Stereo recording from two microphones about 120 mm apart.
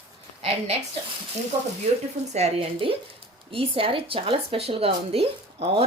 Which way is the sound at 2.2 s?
65° right (ahead or behind).